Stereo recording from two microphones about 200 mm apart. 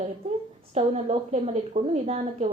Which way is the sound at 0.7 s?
35° right (ahead or behind).